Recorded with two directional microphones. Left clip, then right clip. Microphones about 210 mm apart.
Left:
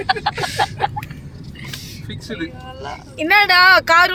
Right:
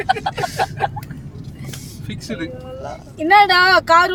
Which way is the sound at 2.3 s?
25° right (ahead or behind).